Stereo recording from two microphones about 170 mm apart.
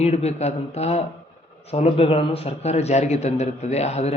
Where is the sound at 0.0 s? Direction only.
40° left (ahead or behind).